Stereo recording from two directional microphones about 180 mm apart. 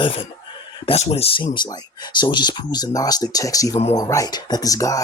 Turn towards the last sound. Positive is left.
turn(degrees=20)  # may be behind; listen again after turning